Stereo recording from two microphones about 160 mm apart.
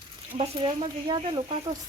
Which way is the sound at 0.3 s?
35° right (ahead or behind).